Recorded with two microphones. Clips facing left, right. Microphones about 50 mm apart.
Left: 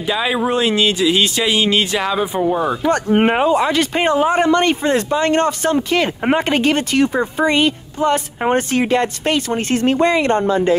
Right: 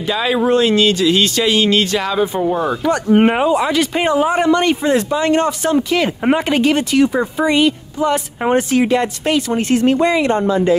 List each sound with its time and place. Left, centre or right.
0.0 s speech: centre
2.9 s speech: left